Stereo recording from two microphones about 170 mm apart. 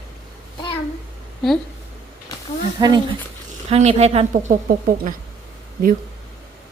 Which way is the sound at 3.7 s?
40° right (ahead or behind).